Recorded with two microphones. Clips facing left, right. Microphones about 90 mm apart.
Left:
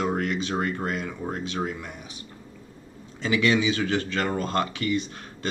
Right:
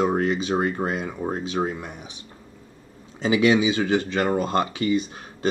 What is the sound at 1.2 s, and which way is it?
Speech, 30° right (ahead or behind).